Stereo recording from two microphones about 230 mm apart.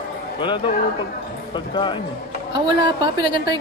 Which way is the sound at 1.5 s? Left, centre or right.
Left.